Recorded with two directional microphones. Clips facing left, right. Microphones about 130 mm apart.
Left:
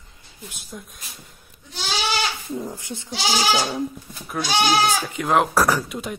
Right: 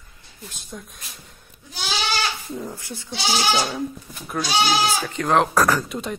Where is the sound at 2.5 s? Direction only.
15° left (ahead or behind).